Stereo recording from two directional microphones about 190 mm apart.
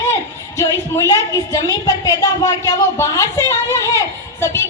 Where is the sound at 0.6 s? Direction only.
15° left (ahead or behind).